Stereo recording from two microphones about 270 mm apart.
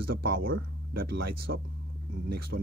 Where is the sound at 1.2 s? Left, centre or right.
Right.